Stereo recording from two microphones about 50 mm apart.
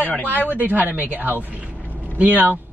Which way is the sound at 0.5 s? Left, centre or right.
Right.